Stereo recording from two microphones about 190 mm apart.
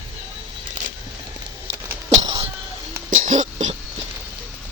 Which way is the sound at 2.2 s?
25° right (ahead or behind).